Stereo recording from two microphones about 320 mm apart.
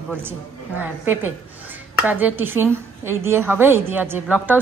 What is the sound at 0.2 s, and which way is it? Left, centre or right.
A woman's voice, centre.